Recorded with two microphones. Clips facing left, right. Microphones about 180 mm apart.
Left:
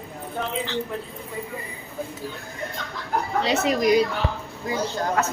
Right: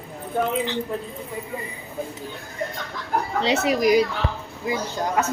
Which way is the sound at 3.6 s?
5° right (ahead or behind).